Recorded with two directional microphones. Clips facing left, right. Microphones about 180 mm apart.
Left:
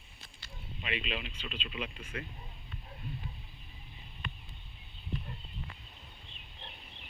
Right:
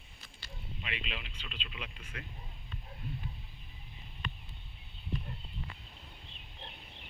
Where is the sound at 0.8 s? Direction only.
20° left (ahead or behind).